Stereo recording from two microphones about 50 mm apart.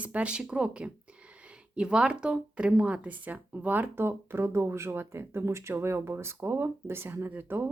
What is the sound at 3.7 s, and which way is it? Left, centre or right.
Speech, right.